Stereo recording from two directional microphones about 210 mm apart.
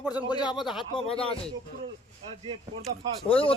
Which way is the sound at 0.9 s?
25° left (ahead or behind).